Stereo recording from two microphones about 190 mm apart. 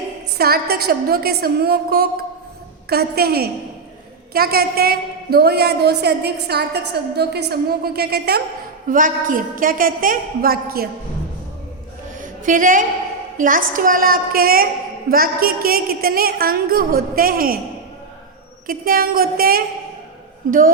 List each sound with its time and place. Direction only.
0.3 s a woman's voice: 55° right (ahead or behind)
8.9 s a woman's voice: 45° right (ahead or behind)
12.2 s a sound: 45° right (ahead or behind)
13.3 s a woman's voice: 45° right (ahead or behind)
18.7 s a woman's voice: 50° right (ahead or behind)